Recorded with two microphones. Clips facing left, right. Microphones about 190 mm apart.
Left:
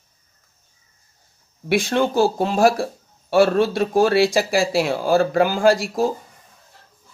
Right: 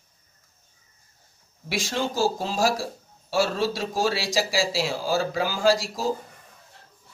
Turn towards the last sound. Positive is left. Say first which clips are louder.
# left 5 dB
turn(degrees=55)  # may be behind; listen again after turning